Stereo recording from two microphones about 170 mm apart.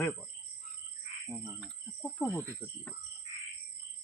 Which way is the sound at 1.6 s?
5° left (ahead or behind).